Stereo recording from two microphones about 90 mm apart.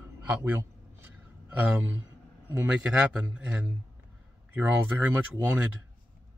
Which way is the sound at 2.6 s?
10° right (ahead or behind).